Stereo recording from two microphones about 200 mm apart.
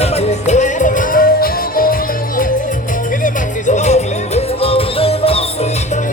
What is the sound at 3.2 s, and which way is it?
Music, 35° left (ahead or behind).